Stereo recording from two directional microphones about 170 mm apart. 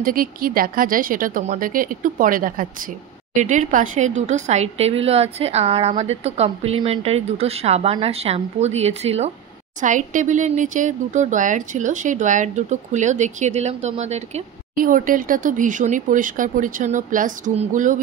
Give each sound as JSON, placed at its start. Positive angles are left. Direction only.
{"t": 0.0, "sound": "a woman's voice", "side_deg": -55}
{"t": 14.8, "sound": "speech", "side_deg": -55}